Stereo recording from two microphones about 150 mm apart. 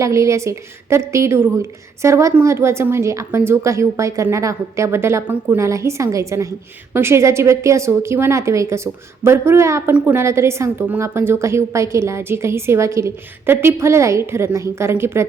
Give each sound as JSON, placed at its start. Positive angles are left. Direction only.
{"t": 0.0, "sound": "a woman's voice", "side_deg": -20}